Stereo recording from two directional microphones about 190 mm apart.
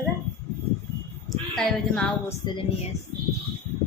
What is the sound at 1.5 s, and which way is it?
Speech, 5° left (ahead or behind).